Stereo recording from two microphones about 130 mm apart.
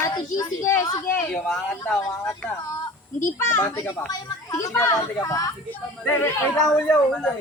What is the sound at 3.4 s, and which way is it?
Speech, 20° left (ahead or behind).